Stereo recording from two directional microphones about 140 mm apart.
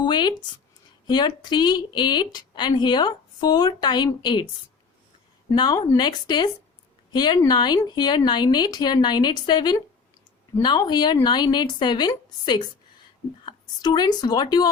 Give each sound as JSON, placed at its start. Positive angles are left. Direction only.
{"t": 0.0, "sound": "a woman's voice", "side_deg": 30}
{"t": 5.5, "sound": "a woman's voice", "side_deg": 30}